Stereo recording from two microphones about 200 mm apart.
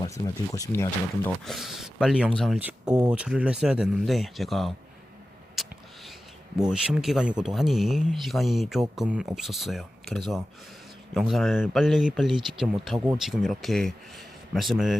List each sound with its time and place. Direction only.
0.0 s speech: 15° left (ahead or behind)
1.5 s speech: centre (ahead or behind)
5.6 s a sound: centre (ahead or behind)
6.6 s speech: 5° right (ahead or behind)